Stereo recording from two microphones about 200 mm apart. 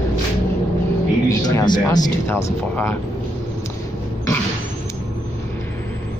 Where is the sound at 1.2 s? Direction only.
15° left (ahead or behind).